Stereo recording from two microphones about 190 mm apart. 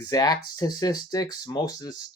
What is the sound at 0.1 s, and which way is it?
Speech, 20° left (ahead or behind).